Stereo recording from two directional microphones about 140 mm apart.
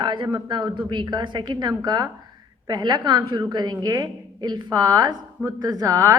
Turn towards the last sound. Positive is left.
turn(degrees=-20)  # may be behind; listen again after turning